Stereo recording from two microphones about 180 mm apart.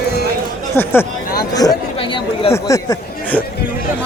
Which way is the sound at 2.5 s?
15° left (ahead or behind).